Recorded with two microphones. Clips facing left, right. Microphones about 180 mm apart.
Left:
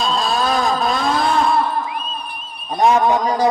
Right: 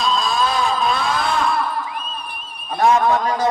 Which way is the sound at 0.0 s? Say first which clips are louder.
Left 1 dB; 35° left (ahead or behind).